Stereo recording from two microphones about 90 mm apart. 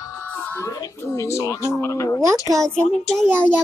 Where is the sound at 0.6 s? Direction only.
30° left (ahead or behind).